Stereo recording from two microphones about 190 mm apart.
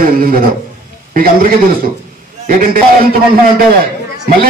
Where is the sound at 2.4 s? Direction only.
45° right (ahead or behind).